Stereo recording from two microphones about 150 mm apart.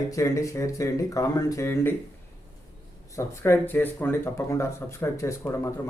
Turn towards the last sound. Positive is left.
turn(degrees=20)  # may be behind; listen again after turning